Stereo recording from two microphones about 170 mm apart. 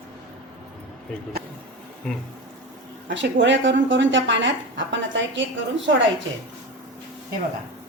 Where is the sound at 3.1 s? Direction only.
90° right.